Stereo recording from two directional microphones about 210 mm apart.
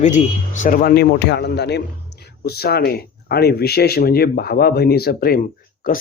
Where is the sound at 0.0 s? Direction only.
35° left (ahead or behind).